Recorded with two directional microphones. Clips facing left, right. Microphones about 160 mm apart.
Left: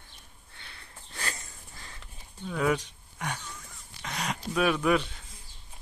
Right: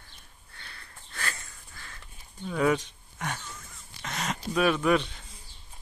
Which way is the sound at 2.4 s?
5° right (ahead or behind).